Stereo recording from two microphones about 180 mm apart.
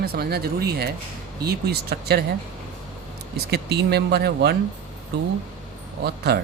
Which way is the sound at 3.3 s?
60° right (ahead or behind).